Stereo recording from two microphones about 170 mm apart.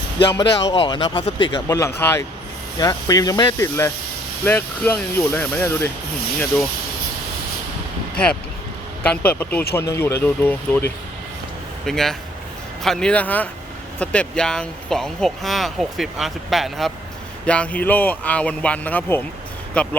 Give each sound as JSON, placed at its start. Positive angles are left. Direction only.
{"t": 0.3, "sound": "speech", "side_deg": 25}
{"t": 9.0, "sound": "speech", "side_deg": 10}